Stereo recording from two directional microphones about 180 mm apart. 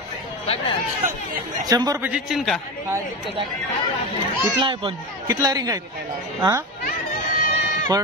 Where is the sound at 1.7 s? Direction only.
20° right (ahead or behind).